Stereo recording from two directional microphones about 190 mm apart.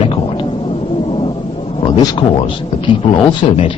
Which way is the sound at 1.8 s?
25° left (ahead or behind).